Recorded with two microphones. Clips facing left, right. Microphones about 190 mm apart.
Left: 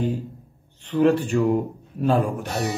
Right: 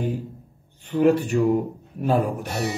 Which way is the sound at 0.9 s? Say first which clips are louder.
Even; 10° right (ahead or behind).